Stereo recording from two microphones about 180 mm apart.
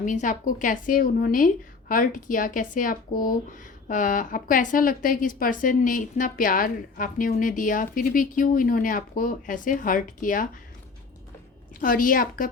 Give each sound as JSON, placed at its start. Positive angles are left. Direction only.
{"t": 0.0, "sound": "speech", "side_deg": 45}
{"t": 11.8, "sound": "speech", "side_deg": 50}